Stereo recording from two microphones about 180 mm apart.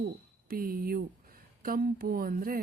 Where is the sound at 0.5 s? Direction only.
55° right (ahead or behind).